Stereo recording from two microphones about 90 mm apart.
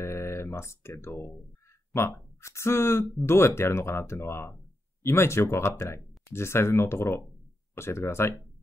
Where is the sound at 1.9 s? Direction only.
35° left (ahead or behind).